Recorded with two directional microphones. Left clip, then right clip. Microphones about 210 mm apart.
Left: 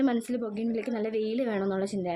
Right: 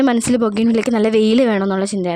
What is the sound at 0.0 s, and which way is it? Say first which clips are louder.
A woman's voice: right 13 dB; 45° right (ahead or behind).